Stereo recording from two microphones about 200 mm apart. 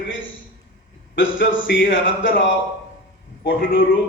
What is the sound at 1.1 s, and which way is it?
A man's voice, 70° left (ahead or behind).